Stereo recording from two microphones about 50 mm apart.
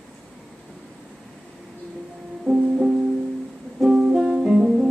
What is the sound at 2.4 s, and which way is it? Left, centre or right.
Music, centre.